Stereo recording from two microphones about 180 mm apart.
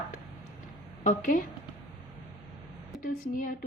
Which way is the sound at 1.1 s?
45° left (ahead or behind).